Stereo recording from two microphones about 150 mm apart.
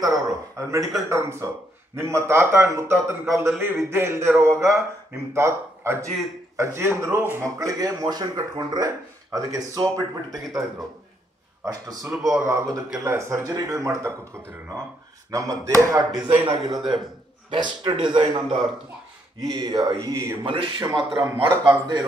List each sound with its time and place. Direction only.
0.0 s a sound: 20° right (ahead or behind)
1.0 s a man's voice: 15° right (ahead or behind)
11.6 s speech: 25° right (ahead or behind)
15.3 s speech: 25° right (ahead or behind)
16.1 s a man's voice: 5° right (ahead or behind)
16.4 s a man's voice: 30° right (ahead or behind)
20.4 s a man's voice: 35° right (ahead or behind)
21.5 s speech: 20° right (ahead or behind)